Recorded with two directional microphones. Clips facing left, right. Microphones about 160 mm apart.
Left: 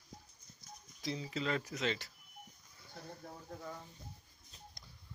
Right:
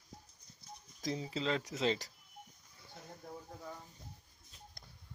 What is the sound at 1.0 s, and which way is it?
Speech, 40° right (ahead or behind).